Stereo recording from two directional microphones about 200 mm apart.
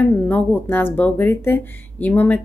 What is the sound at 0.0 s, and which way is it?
Speech, 10° left (ahead or behind).